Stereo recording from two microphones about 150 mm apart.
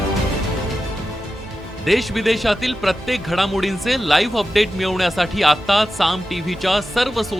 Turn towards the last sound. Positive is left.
turn(degrees=0)  # may be behind; listen again after turning